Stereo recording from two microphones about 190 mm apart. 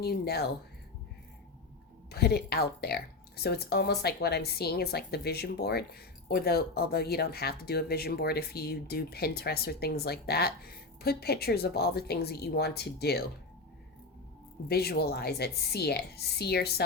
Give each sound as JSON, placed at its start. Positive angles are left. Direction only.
{"t": 0.0, "sound": "speech", "side_deg": 55}
{"t": 2.0, "sound": "speech", "side_deg": 55}
{"t": 14.7, "sound": "speech", "side_deg": 55}